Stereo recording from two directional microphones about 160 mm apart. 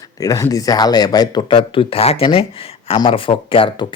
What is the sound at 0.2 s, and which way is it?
Speech, 20° left (ahead or behind).